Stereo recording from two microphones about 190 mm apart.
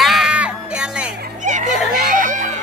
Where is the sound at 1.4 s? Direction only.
40° right (ahead or behind).